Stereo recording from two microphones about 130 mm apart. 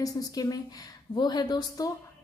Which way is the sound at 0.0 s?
30° left (ahead or behind).